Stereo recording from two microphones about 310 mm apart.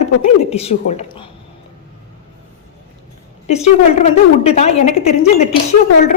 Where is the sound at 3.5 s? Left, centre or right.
Left.